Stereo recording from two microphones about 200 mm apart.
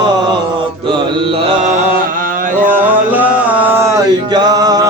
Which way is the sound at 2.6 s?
10° right (ahead or behind).